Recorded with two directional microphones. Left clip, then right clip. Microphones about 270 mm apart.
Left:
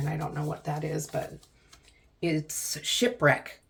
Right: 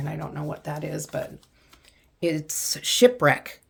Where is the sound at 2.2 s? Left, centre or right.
Right.